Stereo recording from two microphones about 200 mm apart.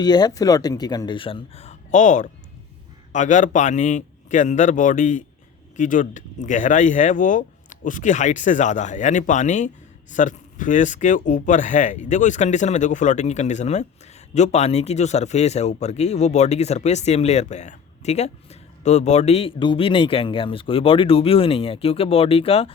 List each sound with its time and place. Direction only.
0.0 s speech: 20° left (ahead or behind)